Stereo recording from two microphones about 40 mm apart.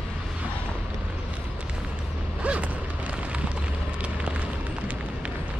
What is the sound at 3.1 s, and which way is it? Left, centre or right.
Eruption, right.